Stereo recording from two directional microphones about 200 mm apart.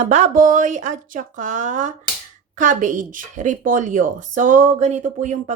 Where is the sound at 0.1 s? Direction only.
40° right (ahead or behind).